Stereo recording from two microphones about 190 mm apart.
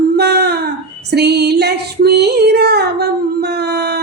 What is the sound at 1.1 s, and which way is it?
Female singing, 60° right (ahead or behind).